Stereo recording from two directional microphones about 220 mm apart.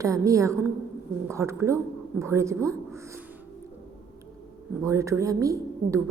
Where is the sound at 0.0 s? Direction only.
15° right (ahead or behind).